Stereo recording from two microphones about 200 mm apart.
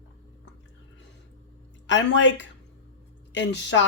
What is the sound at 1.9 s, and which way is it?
Speech, 65° left (ahead or behind).